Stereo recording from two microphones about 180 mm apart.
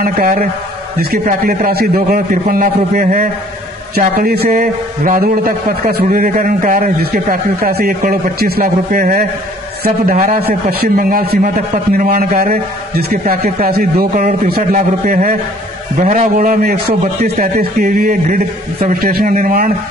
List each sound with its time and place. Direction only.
0.0 s a man's voice: 55° right (ahead or behind)
10.7 s a man's voice: 55° right (ahead or behind)
16.0 s a man's voice: 40° right (ahead or behind)
16.3 s a man's voice: 55° right (ahead or behind)